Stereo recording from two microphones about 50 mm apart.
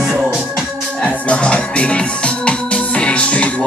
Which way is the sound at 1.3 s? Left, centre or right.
Left.